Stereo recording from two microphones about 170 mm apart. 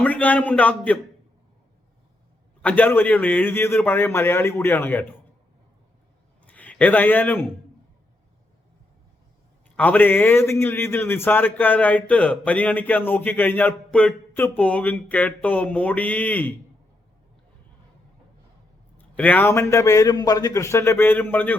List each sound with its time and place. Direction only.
0.0 s a man's voice: 10° left (ahead or behind)
2.6 s a man's voice: 10° left (ahead or behind)
6.4 s a man's voice: 10° left (ahead or behind)
9.7 s a man's voice: 10° left (ahead or behind)
18.9 s a man's voice: 10° left (ahead or behind)